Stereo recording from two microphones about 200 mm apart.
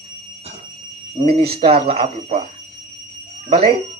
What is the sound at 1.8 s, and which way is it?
Speech, 25° right (ahead or behind).